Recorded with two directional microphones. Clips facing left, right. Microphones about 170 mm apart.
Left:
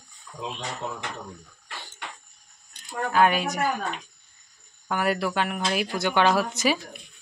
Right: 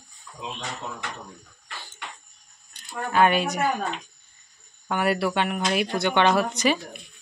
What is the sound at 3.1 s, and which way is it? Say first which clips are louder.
Speech: right 1 dB; centre (ahead or behind).